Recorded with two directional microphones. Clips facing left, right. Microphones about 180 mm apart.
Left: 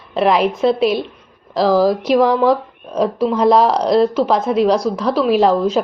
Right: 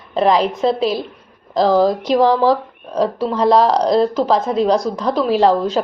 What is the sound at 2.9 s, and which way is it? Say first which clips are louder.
A woman's voice: left 1 dB; 15° left (ahead or behind).